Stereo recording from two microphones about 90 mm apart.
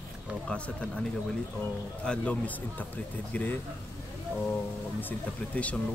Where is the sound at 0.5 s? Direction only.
10° left (ahead or behind).